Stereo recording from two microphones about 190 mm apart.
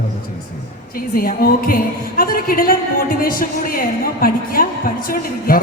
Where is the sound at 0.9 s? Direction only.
50° left (ahead or behind).